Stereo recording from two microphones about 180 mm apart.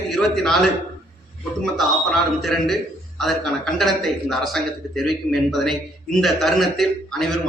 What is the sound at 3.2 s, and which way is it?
A man's voice, centre (ahead or behind).